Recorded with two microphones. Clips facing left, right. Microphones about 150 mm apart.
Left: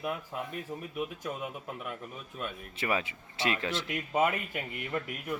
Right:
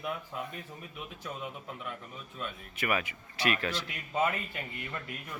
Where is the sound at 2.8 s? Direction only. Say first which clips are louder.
Even; 25° left (ahead or behind).